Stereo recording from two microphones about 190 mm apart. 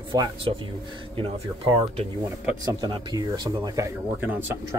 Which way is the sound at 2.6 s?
20° right (ahead or behind).